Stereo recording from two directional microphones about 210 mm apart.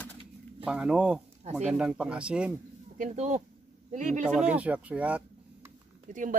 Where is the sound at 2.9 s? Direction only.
35° right (ahead or behind).